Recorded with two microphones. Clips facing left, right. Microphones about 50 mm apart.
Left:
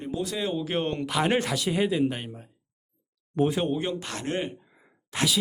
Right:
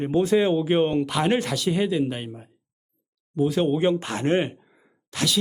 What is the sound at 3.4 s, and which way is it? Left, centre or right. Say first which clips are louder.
Speech: right 1 dB; left.